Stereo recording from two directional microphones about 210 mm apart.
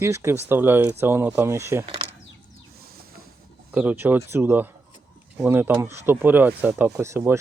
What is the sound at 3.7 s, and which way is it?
Speech, 5° right (ahead or behind).